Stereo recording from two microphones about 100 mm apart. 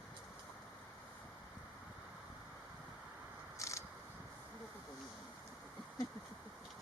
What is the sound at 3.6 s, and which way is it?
Vehicle, 30° left (ahead or behind).